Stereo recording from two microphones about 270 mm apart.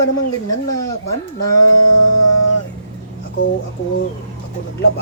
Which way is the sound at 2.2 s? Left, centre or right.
Left.